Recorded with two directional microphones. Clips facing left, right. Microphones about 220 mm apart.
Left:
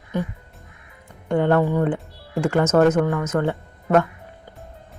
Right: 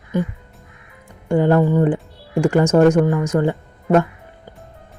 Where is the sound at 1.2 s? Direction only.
10° right (ahead or behind).